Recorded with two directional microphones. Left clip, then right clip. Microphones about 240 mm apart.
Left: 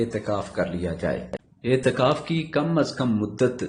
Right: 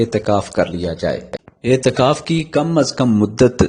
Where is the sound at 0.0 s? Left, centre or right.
Right.